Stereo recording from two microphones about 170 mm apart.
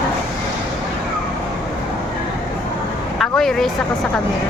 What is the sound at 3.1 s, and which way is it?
Vehicle, centre (ahead or behind).